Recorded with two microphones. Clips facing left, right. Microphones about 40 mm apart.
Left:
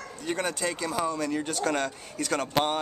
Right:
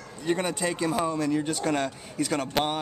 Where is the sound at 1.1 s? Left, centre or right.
Centre.